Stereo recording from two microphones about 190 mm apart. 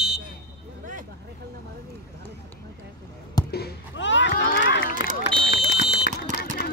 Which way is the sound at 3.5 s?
55° left (ahead or behind).